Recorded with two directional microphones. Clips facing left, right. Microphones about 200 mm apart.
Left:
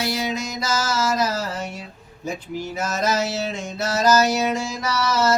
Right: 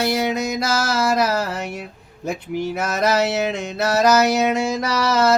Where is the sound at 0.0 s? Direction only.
55° right (ahead or behind).